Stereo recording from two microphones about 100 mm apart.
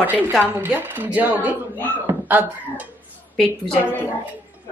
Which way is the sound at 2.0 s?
20° right (ahead or behind).